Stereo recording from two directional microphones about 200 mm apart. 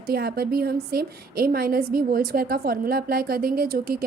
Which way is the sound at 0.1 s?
50° right (ahead or behind).